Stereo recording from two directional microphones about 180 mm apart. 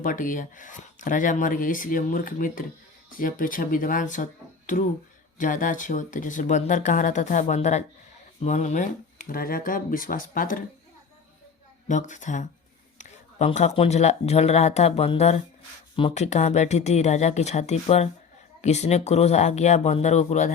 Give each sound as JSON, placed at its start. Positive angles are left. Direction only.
{"t": 0.0, "sound": "speech", "side_deg": 45}
{"t": 11.9, "sound": "speech", "side_deg": 40}